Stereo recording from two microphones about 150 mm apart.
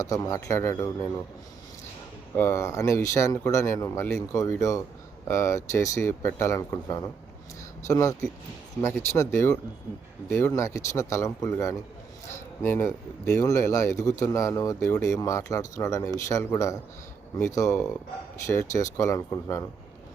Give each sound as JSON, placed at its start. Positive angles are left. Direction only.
{"t": 0.0, "sound": "speech", "side_deg": 20}
{"t": 2.3, "sound": "speech", "side_deg": 15}